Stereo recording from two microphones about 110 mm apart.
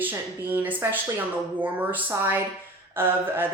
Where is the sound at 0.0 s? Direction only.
15° right (ahead or behind).